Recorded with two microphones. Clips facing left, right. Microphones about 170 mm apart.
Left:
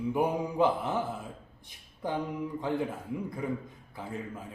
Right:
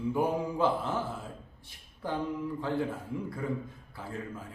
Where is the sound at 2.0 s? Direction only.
15° left (ahead or behind).